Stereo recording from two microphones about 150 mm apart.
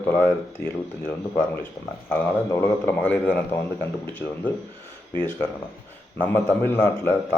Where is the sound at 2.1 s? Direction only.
15° left (ahead or behind).